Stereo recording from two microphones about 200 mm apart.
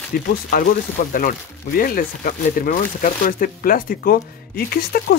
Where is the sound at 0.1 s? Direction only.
50° left (ahead or behind).